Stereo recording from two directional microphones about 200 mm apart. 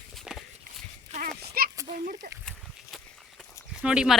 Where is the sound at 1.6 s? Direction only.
50° right (ahead or behind).